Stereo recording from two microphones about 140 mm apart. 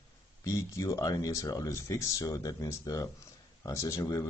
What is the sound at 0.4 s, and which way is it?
Speech, 25° left (ahead or behind).